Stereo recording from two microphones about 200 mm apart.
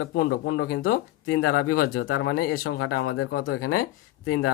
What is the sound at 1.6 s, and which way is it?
Speech, 90° left.